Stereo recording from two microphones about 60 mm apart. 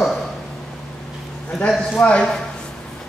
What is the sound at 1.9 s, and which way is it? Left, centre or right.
Speech, left.